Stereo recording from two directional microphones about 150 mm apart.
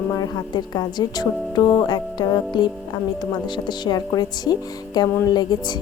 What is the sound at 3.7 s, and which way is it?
A woman's voice, 30° left (ahead or behind).